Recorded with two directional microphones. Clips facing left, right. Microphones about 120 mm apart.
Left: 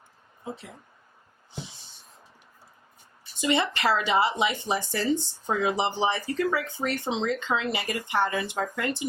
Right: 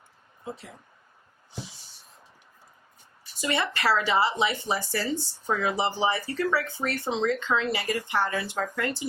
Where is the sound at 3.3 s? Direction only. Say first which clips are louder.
Left 3 dB; 20° left (ahead or behind).